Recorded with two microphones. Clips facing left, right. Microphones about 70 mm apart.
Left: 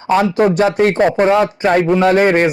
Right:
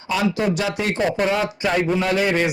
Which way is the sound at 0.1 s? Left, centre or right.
Left.